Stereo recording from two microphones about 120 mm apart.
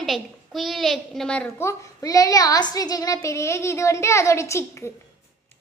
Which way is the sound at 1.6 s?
30° left (ahead or behind).